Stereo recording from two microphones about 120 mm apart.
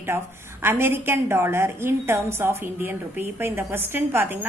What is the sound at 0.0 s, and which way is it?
A woman's voice, 20° right (ahead or behind).